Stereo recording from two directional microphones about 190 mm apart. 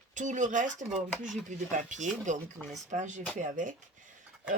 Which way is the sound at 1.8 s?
40° right (ahead or behind).